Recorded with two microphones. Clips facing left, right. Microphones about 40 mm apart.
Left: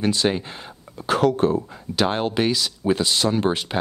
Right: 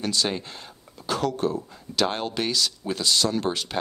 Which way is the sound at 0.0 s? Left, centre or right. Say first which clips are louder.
Left 5 dB; left.